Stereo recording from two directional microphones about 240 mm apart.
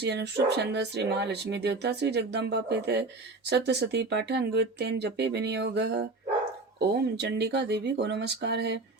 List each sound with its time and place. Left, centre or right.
0.0 s speech: right